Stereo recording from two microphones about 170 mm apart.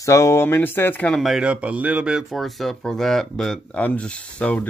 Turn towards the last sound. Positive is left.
turn(degrees=5)  # may be behind; listen again after turning